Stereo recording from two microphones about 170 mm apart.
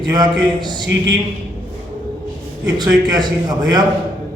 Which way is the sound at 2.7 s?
25° right (ahead or behind).